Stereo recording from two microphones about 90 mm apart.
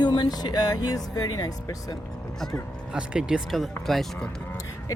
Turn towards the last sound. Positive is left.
turn(degrees=0)  # may be behind; listen again after turning